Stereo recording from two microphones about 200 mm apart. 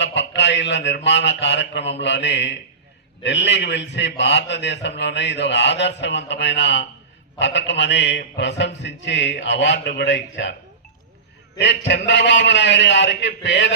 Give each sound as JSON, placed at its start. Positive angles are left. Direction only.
{"t": 0.0, "sound": "a man's voice", "side_deg": 60}
{"t": 11.5, "sound": "a man's voice", "side_deg": 60}